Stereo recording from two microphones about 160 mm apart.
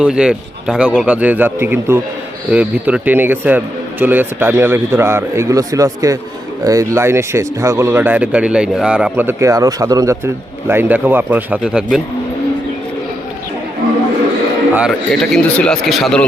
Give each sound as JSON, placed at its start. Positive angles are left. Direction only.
{"t": 0.0, "sound": "speech", "side_deg": -5}
{"t": 14.8, "sound": "a man's voice", "side_deg": 0}